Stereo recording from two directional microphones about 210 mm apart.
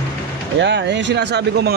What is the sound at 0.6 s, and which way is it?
Speech, 55° right (ahead or behind).